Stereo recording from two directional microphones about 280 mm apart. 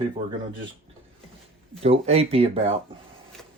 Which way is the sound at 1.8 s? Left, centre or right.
Right.